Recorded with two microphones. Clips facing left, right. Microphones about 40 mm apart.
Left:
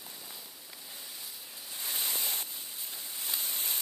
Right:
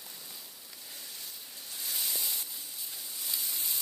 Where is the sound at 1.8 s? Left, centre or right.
Left.